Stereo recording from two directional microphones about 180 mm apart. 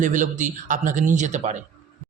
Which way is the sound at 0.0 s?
45° right (ahead or behind).